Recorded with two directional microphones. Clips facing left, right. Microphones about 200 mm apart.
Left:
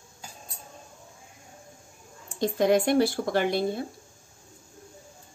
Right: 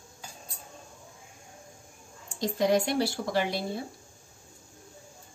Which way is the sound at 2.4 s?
50° left (ahead or behind).